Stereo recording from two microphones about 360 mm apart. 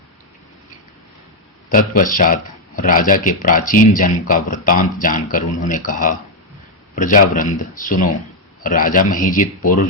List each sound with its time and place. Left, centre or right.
1.7 s speech: left